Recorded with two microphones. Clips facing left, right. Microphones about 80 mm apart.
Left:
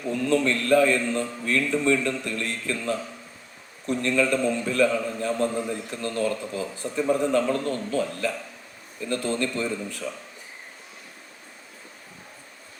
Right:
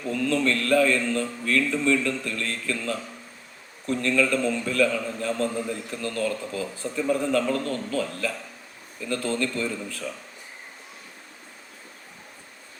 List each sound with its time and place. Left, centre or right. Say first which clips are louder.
0.0 s a man's voice: left 1 dB; left